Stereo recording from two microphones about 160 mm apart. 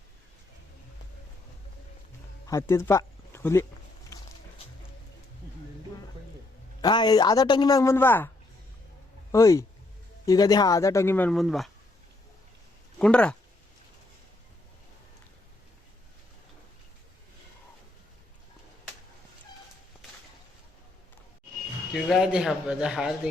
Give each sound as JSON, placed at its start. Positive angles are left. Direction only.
{"t": 2.5, "sound": "speech", "side_deg": 15}
{"t": 6.8, "sound": "a woman's voice", "side_deg": 25}
{"t": 9.3, "sound": "a woman's voice", "side_deg": 20}
{"t": 11.3, "sound": "speech", "side_deg": 0}
{"t": 13.0, "sound": "speech", "side_deg": 5}
{"t": 21.9, "sound": "speech", "side_deg": 0}